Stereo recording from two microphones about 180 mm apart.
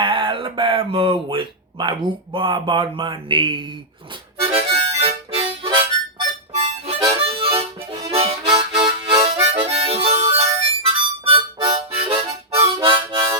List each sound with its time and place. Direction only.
0.0 s speech: 25° right (ahead or behind)
4.5 s harmonica: 35° right (ahead or behind)